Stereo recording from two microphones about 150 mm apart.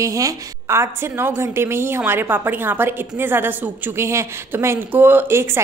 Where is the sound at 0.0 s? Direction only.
20° right (ahead or behind).